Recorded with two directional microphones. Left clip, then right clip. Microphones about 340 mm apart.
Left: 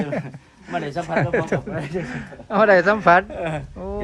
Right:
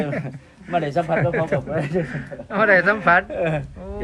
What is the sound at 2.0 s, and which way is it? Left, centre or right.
Speech, centre.